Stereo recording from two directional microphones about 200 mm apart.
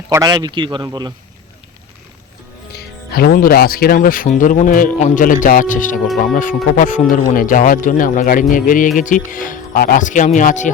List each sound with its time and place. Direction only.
0.1 s a man's voice: 20° right (ahead or behind)
3.1 s speech: 50° left (ahead or behind)